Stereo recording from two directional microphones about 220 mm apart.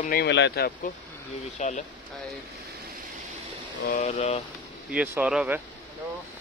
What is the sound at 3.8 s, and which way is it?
Speech, 30° left (ahead or behind).